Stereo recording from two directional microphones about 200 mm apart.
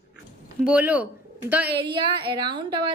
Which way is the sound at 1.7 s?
25° right (ahead or behind).